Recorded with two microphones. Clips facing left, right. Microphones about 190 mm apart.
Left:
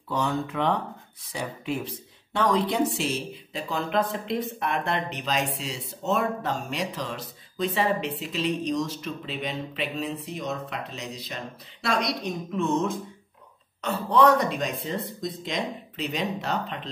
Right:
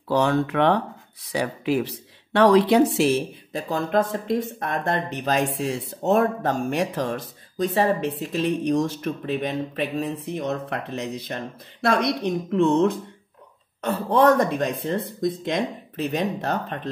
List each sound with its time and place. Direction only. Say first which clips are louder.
0.1 s speech: right 7 dB; 75° right (ahead or behind)
13.7 s speech: right 2 dB; 50° right (ahead or behind)